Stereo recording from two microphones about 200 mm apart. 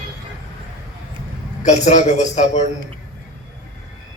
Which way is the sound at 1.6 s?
35° left (ahead or behind).